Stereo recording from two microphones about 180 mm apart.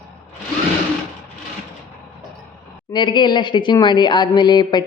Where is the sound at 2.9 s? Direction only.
25° left (ahead or behind).